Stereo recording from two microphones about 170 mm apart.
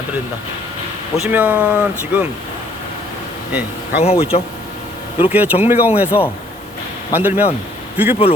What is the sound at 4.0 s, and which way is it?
Speech, 35° left (ahead or behind).